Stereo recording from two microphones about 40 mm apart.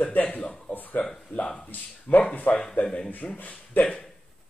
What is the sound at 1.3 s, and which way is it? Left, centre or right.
Speech, left.